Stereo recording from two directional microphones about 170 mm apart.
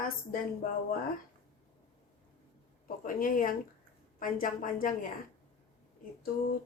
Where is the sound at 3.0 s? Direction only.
55° left (ahead or behind).